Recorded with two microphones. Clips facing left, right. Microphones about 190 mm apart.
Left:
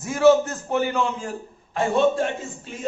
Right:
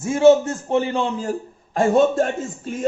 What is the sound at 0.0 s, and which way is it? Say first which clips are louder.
A man's voice: right 3 dB; 25° right (ahead or behind).